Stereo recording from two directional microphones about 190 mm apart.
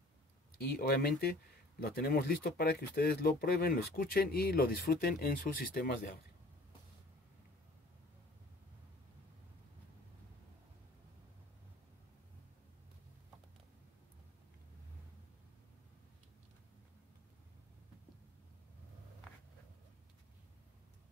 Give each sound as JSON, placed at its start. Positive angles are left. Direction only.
{"t": 0.6, "sound": "speech", "side_deg": 50}